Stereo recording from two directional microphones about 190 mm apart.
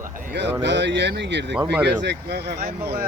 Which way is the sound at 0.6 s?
65° right (ahead or behind).